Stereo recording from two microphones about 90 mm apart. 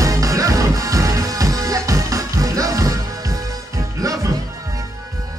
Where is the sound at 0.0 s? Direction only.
40° right (ahead or behind).